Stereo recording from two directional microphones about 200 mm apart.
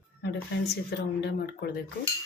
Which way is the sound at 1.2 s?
55° left (ahead or behind).